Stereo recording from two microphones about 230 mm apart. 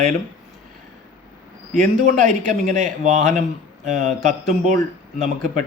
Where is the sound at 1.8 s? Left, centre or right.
Right.